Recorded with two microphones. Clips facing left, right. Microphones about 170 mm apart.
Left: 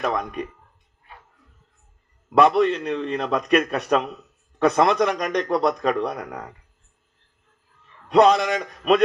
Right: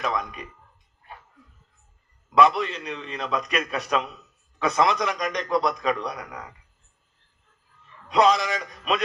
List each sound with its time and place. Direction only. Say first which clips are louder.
0.0 s a man's voice: left 4 dB; 55° left (ahead or behind)
2.3 s a man's voice: left 3 dB; 55° left (ahead or behind)
8.0 s a man's voice: left 4 dB; 60° left (ahead or behind)